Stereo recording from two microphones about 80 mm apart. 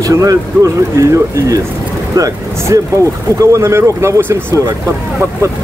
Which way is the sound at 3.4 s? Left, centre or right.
Right.